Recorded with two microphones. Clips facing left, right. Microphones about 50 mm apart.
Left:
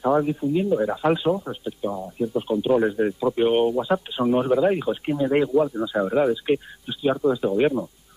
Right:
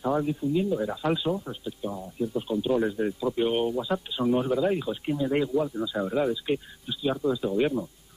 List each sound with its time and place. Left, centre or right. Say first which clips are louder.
0.0 s speech: left 5 dB; left